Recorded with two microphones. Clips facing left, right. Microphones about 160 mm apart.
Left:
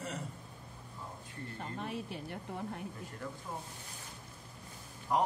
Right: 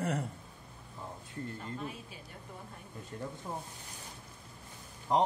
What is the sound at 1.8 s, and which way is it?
Speech, 70° left (ahead or behind).